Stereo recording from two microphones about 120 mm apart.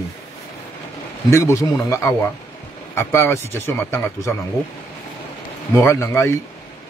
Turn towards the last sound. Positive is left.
turn(degrees=25)  # may be behind; listen again after turning